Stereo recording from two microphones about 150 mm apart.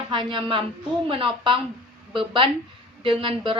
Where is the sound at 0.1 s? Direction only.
35° right (ahead or behind).